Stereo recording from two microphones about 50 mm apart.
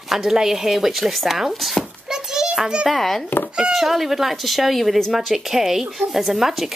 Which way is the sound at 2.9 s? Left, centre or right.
Centre.